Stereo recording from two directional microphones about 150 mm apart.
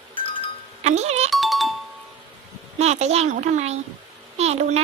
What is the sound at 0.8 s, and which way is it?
Music, 45° right (ahead or behind).